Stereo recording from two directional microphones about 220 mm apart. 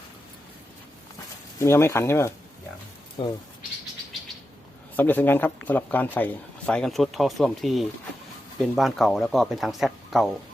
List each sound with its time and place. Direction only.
1.5 s speech: 10° left (ahead or behind)
3.2 s speech: 25° left (ahead or behind)
4.9 s a man's voice: 10° left (ahead or behind)